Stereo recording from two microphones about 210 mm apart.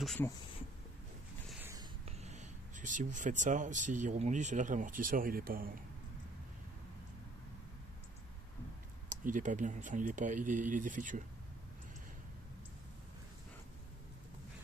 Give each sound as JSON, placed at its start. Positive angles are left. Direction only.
{"t": 0.0, "sound": "speech", "side_deg": 5}
{"t": 1.5, "sound": "a sound", "side_deg": -10}
{"t": 2.0, "sound": "speech", "side_deg": -30}
{"t": 9.1, "sound": "speech", "side_deg": -40}